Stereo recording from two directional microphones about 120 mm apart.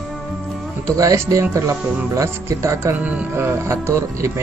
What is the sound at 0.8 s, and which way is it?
Speech, 25° right (ahead or behind).